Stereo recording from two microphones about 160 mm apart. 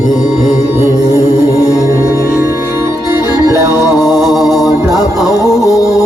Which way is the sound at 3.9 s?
25° left (ahead or behind).